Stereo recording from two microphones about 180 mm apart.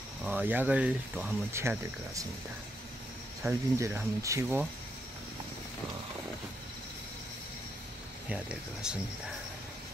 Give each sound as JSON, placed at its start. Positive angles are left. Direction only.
{"t": 0.2, "sound": "speech", "side_deg": -10}
{"t": 3.4, "sound": "speech", "side_deg": -15}
{"t": 8.3, "sound": "speech", "side_deg": -5}